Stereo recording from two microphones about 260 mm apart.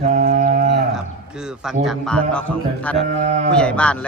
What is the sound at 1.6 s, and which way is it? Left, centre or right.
A man's voice, centre.